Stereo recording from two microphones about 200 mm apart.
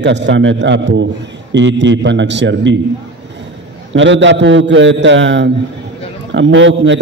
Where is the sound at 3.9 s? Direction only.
65° right (ahead or behind).